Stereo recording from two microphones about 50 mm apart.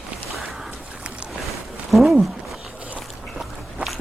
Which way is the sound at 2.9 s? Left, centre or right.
Centre.